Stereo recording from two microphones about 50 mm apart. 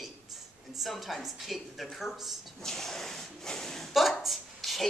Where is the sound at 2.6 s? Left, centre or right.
Centre.